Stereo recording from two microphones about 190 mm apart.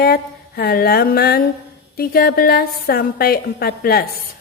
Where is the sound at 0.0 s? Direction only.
55° left (ahead or behind).